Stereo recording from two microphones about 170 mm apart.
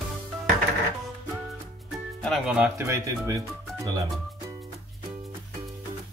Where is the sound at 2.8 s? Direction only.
15° right (ahead or behind).